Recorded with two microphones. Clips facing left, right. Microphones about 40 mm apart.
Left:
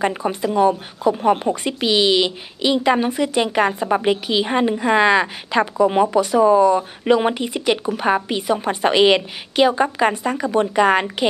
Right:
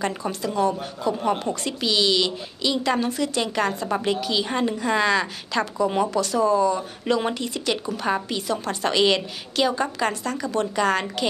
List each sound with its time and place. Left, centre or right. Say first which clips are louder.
0.0 s a woman's voice: left 6 dB; left
1.1 s speech: left 6 dB; centre
1.4 s a woman's voice: left 5 dB; left